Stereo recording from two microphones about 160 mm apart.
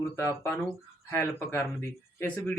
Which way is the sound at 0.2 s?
20° left (ahead or behind).